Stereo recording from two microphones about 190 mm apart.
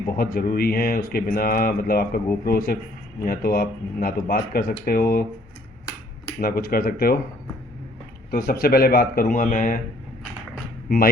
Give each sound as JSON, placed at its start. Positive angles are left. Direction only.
{"t": 0.2, "sound": "speech", "side_deg": 50}
{"t": 6.4, "sound": "speech", "side_deg": 50}
{"t": 8.3, "sound": "speech", "side_deg": 55}
{"t": 10.8, "sound": "speech", "side_deg": 50}